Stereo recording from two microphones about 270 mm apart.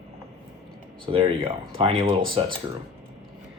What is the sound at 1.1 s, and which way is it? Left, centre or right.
Speech, centre.